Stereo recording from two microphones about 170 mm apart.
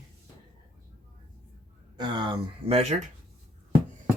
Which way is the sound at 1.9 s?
25° right (ahead or behind).